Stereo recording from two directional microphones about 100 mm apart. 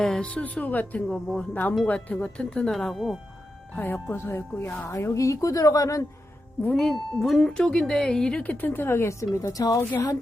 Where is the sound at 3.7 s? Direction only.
15° left (ahead or behind); by 6.1 s 35° left (ahead or behind).